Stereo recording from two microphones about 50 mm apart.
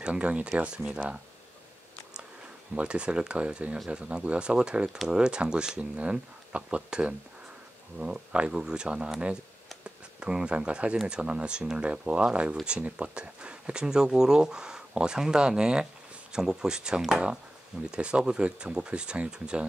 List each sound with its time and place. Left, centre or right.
0.0 s speech: right
2.7 s speech: right
10.2 s speech: centre